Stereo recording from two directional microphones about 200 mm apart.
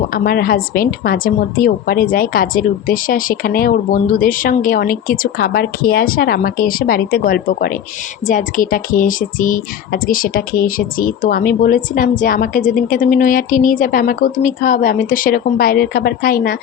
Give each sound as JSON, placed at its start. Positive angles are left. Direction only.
{"t": 0.1, "sound": "speech", "side_deg": 45}